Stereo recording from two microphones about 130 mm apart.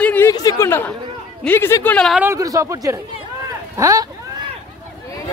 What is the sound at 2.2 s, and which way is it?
Speech, 25° right (ahead or behind).